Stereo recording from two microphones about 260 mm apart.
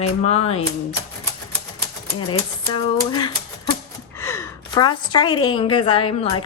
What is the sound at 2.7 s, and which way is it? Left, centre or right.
Speech, centre.